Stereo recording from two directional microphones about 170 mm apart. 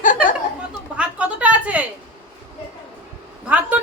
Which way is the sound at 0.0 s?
50° left (ahead or behind).